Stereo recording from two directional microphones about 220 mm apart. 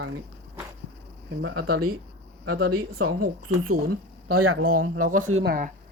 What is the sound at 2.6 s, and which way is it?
Speech, 70° right (ahead or behind).